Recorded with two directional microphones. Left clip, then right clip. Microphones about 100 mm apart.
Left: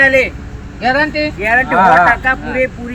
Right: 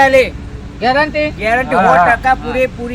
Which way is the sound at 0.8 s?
15° right (ahead or behind).